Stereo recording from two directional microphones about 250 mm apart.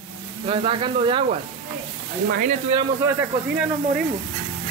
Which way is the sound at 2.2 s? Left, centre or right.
Right.